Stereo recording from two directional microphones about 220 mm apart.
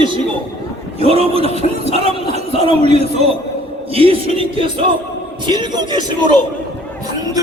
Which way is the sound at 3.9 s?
25° right (ahead or behind).